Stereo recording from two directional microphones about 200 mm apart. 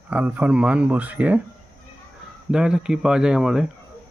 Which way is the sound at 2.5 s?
5° right (ahead or behind).